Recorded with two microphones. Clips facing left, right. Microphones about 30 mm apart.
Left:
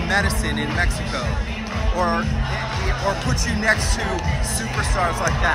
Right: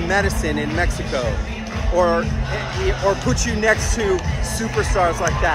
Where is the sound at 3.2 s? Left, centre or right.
Left.